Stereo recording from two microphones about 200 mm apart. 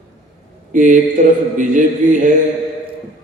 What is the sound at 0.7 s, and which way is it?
Speech, 40° right (ahead or behind).